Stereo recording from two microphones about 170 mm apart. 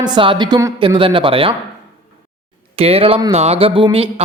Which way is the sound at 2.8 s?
35° right (ahead or behind).